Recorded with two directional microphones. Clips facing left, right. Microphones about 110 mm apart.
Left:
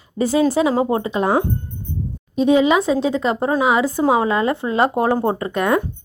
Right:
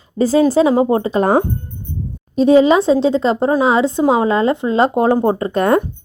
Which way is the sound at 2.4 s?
35° right (ahead or behind).